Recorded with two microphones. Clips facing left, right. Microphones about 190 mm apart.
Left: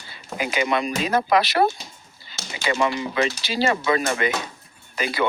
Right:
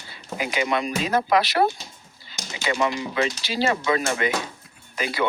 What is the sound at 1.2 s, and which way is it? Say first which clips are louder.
Speech: left 1 dB; 65° left (ahead or behind).